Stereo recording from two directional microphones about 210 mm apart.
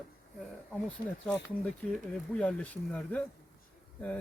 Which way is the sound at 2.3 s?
5° left (ahead or behind).